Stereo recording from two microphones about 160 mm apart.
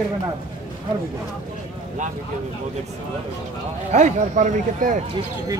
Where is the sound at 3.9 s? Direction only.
50° right (ahead or behind).